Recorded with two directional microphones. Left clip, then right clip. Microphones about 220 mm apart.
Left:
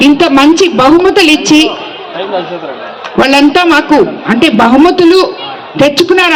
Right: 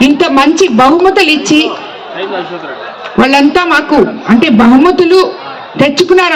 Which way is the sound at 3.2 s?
50° left (ahead or behind).